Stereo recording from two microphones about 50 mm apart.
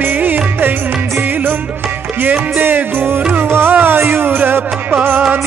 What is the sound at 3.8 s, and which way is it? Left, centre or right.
Music, right.